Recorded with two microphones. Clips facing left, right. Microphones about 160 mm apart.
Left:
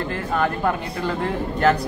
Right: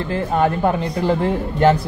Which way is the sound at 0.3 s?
30° right (ahead or behind).